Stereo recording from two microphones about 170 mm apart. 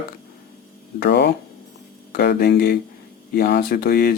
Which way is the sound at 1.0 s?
75° left (ahead or behind).